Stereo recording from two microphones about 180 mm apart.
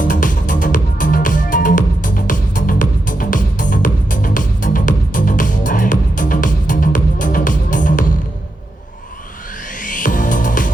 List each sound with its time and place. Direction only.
0.0 s music: 45° left (ahead or behind)
9.7 s music: 45° left (ahead or behind)